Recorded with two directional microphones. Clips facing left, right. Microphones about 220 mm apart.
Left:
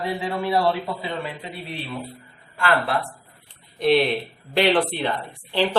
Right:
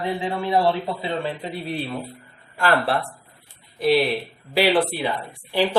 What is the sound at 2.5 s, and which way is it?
Speech, 40° right (ahead or behind).